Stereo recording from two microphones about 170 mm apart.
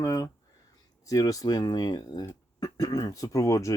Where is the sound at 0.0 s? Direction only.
20° left (ahead or behind).